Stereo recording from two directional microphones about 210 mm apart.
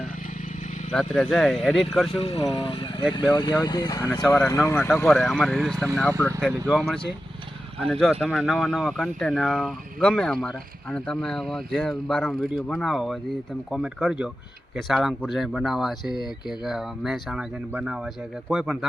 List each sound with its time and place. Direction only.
0.9 s speech: 5° left (ahead or behind)
2.1 s speech: 30° left (ahead or behind); by 18.9 s centre (ahead or behind)